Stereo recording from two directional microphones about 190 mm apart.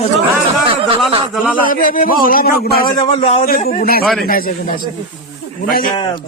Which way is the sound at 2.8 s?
25° left (ahead or behind).